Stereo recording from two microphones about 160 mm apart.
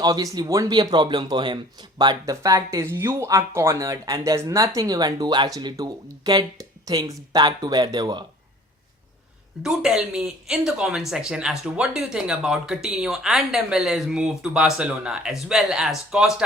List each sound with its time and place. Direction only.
0.0 s speech: 20° right (ahead or behind)
9.6 s speech: 5° right (ahead or behind)